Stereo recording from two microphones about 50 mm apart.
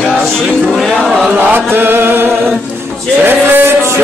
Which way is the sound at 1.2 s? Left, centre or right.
Right.